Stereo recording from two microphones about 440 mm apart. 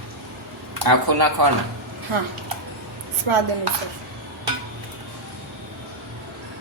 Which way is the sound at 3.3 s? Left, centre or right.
Right.